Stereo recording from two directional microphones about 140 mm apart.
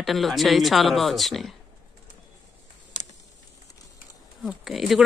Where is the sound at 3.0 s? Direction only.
60° left (ahead or behind).